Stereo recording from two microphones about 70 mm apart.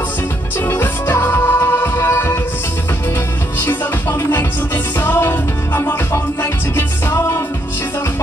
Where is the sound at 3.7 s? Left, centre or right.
Left.